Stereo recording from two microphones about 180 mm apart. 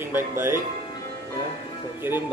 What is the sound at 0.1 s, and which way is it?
Speech, 15° right (ahead or behind).